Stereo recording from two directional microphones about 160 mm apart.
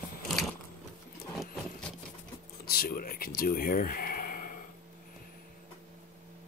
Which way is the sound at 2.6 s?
65° left (ahead or behind).